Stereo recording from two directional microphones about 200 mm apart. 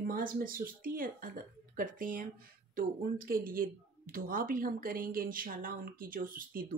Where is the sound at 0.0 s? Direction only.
45° right (ahead or behind).